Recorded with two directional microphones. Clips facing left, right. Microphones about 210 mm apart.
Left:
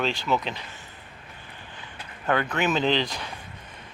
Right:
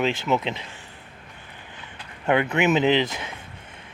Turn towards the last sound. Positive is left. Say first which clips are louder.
# right 4 dB
turn(degrees=-20)  # may be behind; listen again after turning